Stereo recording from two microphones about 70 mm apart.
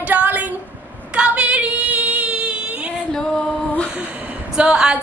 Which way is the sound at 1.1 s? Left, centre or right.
Centre.